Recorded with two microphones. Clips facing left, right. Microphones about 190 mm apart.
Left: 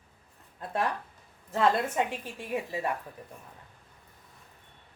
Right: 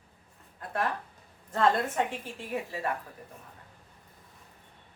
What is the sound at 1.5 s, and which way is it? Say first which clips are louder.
A woman's voice: even; 10° left (ahead or behind).